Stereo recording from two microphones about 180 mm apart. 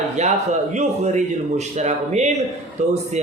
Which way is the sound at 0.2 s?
40° right (ahead or behind).